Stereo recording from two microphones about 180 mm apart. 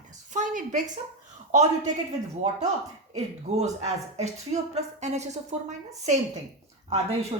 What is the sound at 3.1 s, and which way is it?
Speech, 35° right (ahead or behind).